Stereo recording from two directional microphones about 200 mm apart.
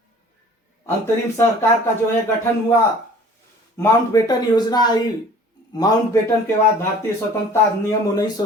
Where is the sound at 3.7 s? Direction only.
15° left (ahead or behind).